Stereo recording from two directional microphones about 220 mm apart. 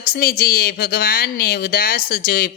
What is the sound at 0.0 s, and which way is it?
Speech, 45° left (ahead or behind).